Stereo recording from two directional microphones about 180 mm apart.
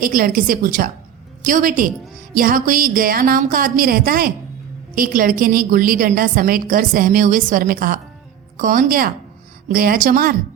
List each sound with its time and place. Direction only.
0.0 s a woman's voice: 50° right (ahead or behind)